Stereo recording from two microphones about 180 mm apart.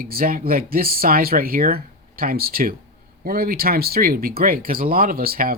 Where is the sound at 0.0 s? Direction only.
55° right (ahead or behind).